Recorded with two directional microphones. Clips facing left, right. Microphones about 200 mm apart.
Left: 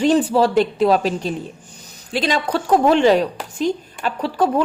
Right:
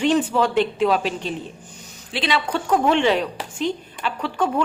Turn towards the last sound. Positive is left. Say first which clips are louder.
# left 4 dB
turn(degrees=40)  # may be behind; listen again after turning